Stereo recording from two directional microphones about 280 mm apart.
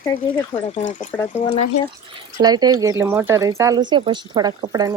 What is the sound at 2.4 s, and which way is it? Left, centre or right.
Speech, centre.